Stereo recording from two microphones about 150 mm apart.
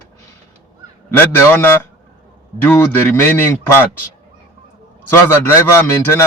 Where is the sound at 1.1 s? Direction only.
15° left (ahead or behind).